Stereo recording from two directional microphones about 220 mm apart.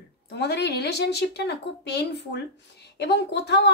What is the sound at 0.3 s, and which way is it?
A woman's voice, 50° left (ahead or behind).